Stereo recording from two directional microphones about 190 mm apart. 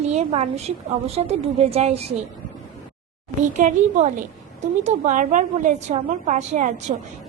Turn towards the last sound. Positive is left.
turn(degrees=-40)  # may be behind; listen again after turning